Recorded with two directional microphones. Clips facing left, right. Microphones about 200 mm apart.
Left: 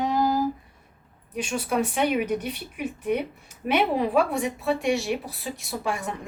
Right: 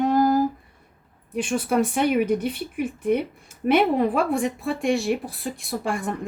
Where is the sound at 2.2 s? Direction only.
50° right (ahead or behind).